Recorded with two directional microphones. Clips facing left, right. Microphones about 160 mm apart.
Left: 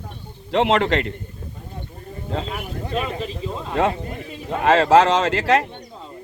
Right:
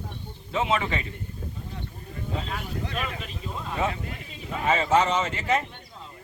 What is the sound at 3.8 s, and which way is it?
Speech, 80° left.